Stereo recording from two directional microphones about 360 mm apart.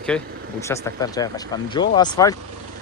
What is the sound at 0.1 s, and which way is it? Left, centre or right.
Speech, centre.